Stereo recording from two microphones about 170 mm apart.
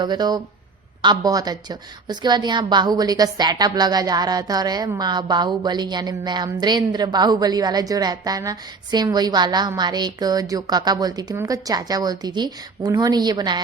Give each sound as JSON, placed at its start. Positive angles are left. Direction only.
{"t": 0.0, "sound": "a woman's voice", "side_deg": -25}